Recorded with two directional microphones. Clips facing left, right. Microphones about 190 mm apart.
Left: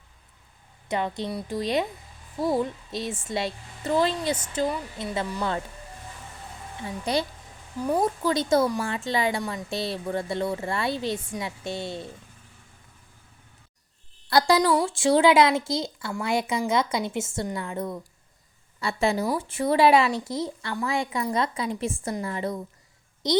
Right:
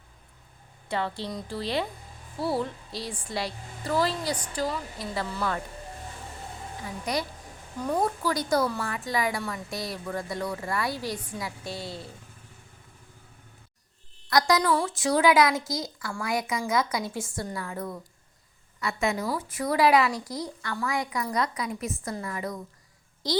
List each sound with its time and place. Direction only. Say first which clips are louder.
0.9 s a woman's voice: left 3 dB; 20° left (ahead or behind)
7.0 s a woman's voice: left 4 dB; 25° left (ahead or behind)
14.3 s a woman's voice: left 3 dB; 30° left (ahead or behind)